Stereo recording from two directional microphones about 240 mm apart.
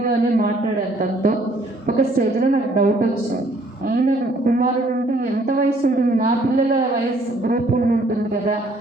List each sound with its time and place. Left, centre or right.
0.0 s a man's voice: right
1.9 s a woman's voice: right
3.9 s a woman's voice: right
7.4 s a woman's voice: right